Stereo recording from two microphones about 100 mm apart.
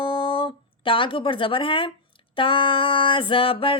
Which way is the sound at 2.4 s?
60° left (ahead or behind).